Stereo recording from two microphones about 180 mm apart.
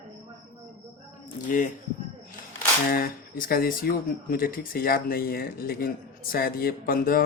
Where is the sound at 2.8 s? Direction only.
55° left (ahead or behind).